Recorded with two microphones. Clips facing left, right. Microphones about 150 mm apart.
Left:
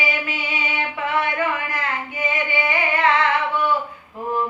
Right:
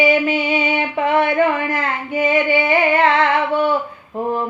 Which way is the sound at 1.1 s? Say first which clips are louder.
Right 7 dB; 25° right (ahead or behind).